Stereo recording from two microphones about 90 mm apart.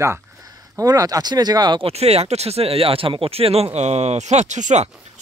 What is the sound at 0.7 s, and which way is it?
Speech, 45° right (ahead or behind).